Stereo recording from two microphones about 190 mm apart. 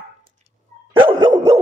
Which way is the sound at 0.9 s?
25° right (ahead or behind).